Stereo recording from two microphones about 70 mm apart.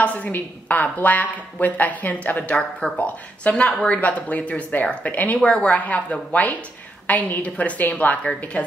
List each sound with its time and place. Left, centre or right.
0.0 s a woman's voice: left